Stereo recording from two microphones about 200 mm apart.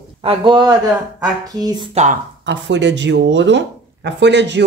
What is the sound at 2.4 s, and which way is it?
A man's voice, 65° right (ahead or behind).